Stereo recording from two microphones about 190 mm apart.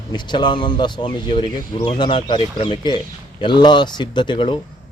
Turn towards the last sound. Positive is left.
turn(degrees=25)  # may be behind; listen again after turning